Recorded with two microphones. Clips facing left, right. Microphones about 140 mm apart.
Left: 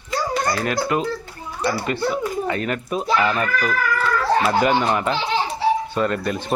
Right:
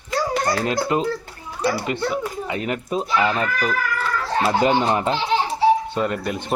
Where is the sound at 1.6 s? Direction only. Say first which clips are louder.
Even; 10° right (ahead or behind); by 5.1 s 30° right (ahead or behind).